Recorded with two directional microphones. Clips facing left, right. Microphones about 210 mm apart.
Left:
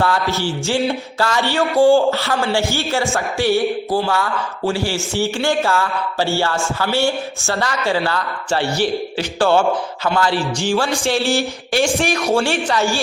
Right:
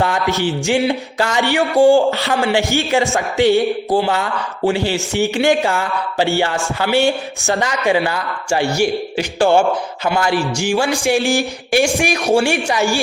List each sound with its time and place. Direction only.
0.0 s speech: 15° right (ahead or behind)